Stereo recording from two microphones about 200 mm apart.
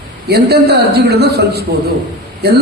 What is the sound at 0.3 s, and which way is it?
Speech, 55° right (ahead or behind).